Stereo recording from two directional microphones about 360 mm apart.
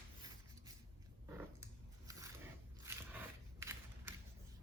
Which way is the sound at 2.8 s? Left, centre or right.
Centre.